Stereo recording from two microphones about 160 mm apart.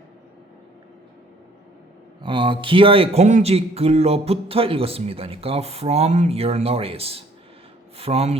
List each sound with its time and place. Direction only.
2.2 s speech: 30° right (ahead or behind)